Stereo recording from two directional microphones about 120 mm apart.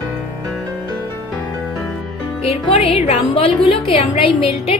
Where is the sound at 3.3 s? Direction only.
50° left (ahead or behind).